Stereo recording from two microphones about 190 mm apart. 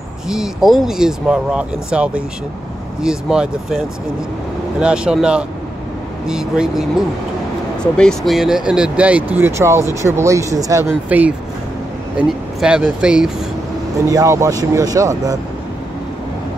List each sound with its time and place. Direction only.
0.3 s speech: 5° right (ahead or behind)
14.0 s speech: 15° right (ahead or behind)